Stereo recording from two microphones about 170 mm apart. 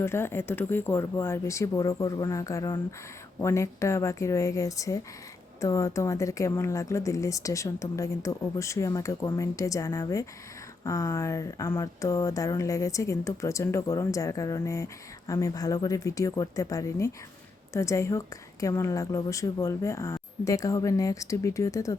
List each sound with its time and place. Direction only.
0.0 s speech: 15° left (ahead or behind)